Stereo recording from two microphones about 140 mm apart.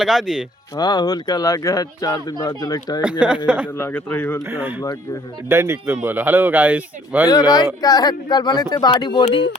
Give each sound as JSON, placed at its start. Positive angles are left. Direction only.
{"t": 0.0, "sound": "speech", "side_deg": 0}
{"t": 0.8, "sound": "speech", "side_deg": 30}
{"t": 3.0, "sound": "speech", "side_deg": -10}
{"t": 3.8, "sound": "a man's voice", "side_deg": 15}
{"t": 5.5, "sound": "speech", "side_deg": -20}
{"t": 7.3, "sound": "speech", "side_deg": 25}